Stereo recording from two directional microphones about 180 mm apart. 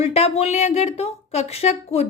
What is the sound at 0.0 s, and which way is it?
Speech, 35° left (ahead or behind).